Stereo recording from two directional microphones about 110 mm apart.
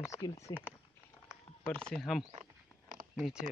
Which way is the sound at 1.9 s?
Centre (ahead or behind).